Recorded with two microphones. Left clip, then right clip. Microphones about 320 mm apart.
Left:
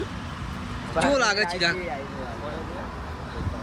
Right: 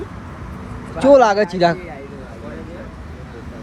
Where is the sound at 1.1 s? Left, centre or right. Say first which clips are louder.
Right 10 dB; centre.